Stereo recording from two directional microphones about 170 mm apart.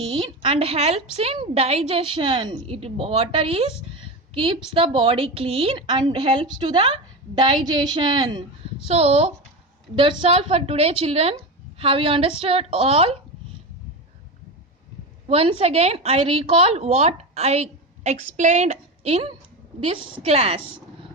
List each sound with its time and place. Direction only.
0.0 s a woman's voice: 30° right (ahead or behind)
8.9 s a woman's voice: 35° right (ahead or behind)
15.3 s a woman's voice: 35° right (ahead or behind)